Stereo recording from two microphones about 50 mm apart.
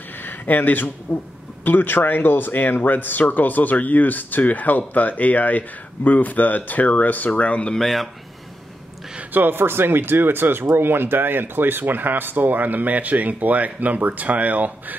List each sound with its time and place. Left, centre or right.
0.2 s a sound: left
1.1 s speech: left
7.7 s speech: centre
9.3 s speech: right